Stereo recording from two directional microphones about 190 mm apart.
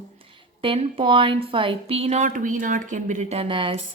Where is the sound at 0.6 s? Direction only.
30° right (ahead or behind).